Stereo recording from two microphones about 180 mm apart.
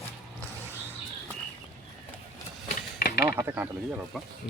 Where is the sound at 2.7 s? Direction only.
50° left (ahead or behind).